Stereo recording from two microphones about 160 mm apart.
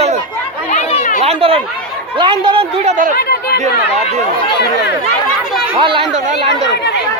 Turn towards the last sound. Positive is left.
turn(degrees=-30)  # may be behind; listen again after turning